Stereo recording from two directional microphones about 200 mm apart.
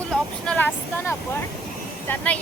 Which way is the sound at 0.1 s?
5° left (ahead or behind).